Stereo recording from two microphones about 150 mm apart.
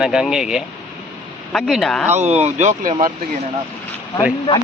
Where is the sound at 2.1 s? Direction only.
50° right (ahead or behind).